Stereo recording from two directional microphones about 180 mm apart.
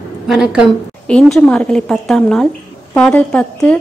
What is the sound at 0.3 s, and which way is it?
A woman's voice, 5° right (ahead or behind).